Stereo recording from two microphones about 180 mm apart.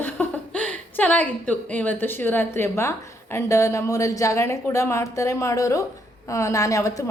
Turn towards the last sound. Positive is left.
turn(degrees=20)  # may be behind; listen again after turning